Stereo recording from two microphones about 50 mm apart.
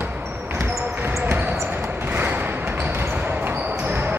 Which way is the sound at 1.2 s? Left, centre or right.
Right.